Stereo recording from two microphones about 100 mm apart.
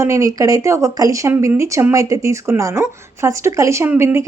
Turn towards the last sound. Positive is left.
turn(degrees=-25)  # may be behind; listen again after turning